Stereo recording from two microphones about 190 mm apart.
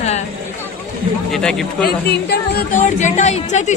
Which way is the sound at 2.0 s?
55° left (ahead or behind).